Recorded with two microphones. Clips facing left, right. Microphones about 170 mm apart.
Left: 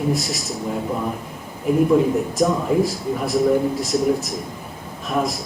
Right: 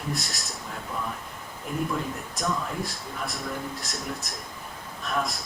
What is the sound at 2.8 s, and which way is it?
Speech, centre (ahead or behind).